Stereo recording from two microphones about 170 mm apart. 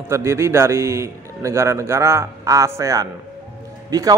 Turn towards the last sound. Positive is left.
turn(degrees=-20)  # may be behind; listen again after turning